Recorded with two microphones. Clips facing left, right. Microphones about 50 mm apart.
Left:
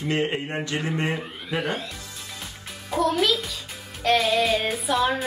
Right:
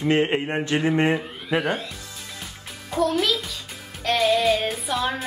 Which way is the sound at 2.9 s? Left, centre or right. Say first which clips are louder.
Even; centre.